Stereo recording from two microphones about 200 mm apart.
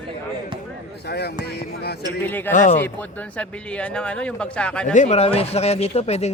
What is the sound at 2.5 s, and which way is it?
Speech, 40° left (ahead or behind).